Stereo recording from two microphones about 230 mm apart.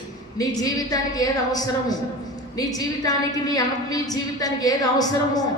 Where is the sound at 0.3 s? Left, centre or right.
Centre.